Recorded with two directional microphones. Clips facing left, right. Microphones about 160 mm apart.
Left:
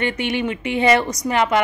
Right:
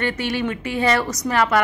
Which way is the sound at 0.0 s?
15° left (ahead or behind).